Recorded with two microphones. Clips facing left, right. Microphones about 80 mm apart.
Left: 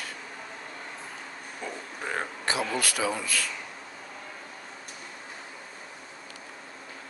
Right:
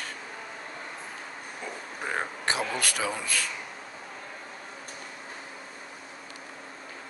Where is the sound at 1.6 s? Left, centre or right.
Centre.